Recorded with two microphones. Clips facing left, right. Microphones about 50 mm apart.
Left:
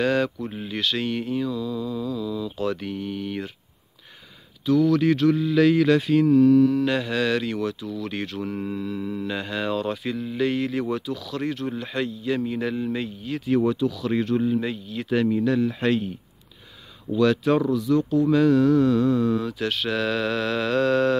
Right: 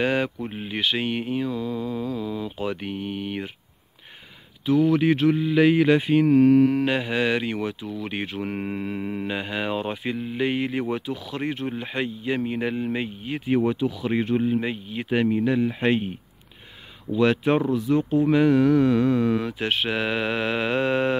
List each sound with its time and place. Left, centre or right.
0.0 s speech: right
2.5 s speech: centre
4.6 s speech: right
6.2 s mantra: right
6.9 s speech: right
8.5 s mantra: right
9.3 s speech: right